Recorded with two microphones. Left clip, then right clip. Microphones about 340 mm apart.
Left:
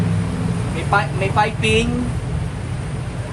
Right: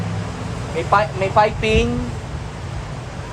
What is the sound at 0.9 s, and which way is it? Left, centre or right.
Speech, right.